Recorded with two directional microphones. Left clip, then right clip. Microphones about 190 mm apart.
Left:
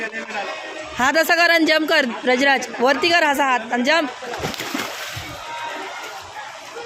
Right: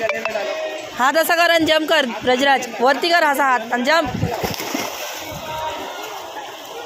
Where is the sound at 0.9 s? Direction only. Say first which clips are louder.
Even; 20° left (ahead or behind).